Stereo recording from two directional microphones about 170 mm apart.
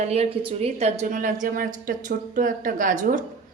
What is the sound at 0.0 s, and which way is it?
A woman's voice, 35° right (ahead or behind).